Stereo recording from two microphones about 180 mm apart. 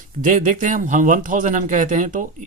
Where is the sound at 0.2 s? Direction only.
45° right (ahead or behind).